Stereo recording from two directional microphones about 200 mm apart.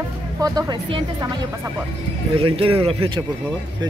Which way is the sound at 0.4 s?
20° right (ahead or behind).